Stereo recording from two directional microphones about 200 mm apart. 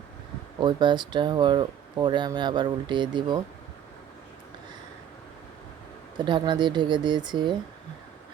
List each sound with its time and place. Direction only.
0.6 s speech: 25° right (ahead or behind)
6.1 s speech: 25° right (ahead or behind)